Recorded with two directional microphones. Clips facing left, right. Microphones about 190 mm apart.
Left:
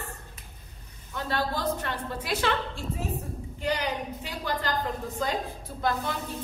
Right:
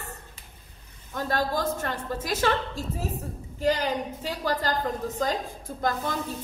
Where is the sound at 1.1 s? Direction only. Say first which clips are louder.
Right 3 dB; 45° right (ahead or behind).